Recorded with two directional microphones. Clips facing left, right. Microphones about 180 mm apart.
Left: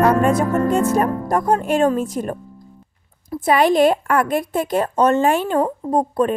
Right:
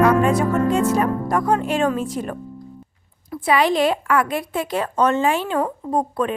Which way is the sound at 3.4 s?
50° left (ahead or behind).